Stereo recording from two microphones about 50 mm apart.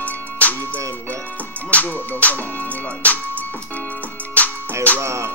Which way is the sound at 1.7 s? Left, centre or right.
Left.